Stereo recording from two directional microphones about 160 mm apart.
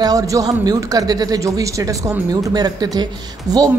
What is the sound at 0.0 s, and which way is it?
Speech, 20° right (ahead or behind).